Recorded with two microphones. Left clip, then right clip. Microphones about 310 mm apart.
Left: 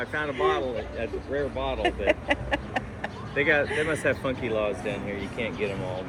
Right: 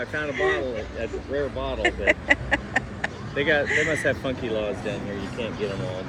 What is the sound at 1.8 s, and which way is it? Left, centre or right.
Vehicle, centre.